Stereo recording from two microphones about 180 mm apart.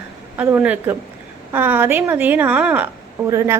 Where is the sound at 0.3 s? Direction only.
10° right (ahead or behind).